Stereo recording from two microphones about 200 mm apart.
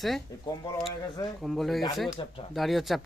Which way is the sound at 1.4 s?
Centre (ahead or behind).